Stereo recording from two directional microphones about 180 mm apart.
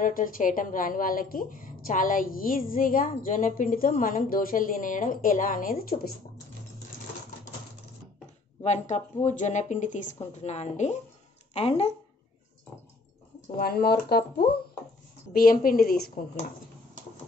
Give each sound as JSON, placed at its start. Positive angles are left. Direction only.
{"t": 0.0, "sound": "a woman's voice", "side_deg": 50}
{"t": 8.6, "sound": "speech", "side_deg": 40}
{"t": 13.6, "sound": "a woman's voice", "side_deg": 60}